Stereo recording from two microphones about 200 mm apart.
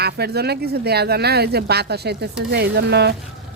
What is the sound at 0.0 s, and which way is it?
Speech, 55° right (ahead or behind).